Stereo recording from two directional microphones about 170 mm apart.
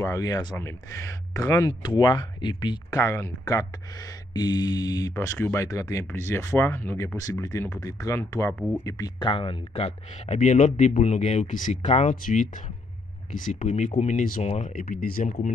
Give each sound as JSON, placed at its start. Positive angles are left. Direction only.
{"t": 0.0, "sound": "speech", "side_deg": 20}